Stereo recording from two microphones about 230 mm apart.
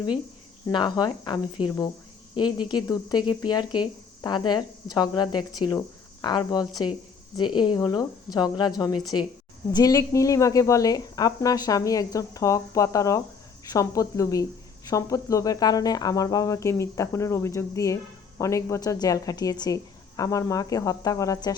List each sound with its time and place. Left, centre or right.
0.7 s speech: centre